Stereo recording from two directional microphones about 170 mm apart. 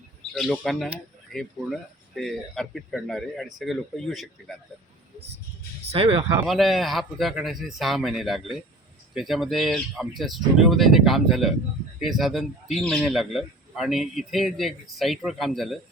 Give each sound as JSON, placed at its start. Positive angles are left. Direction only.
{"t": 0.3, "sound": "a man's voice", "side_deg": 0}
{"t": 5.9, "sound": "speech", "side_deg": -35}
{"t": 6.4, "sound": "a man's voice", "side_deg": 0}